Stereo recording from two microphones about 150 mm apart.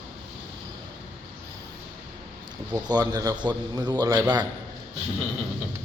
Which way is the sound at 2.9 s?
25° right (ahead or behind).